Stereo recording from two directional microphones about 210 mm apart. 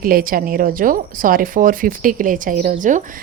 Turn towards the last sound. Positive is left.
turn(degrees=-35)  # may be behind; listen again after turning